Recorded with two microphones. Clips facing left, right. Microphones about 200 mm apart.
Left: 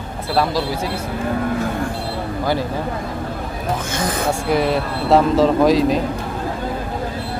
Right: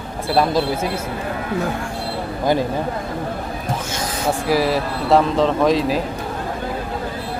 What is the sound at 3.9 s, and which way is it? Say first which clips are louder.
Music: left 4 dB; 55° left (ahead or behind).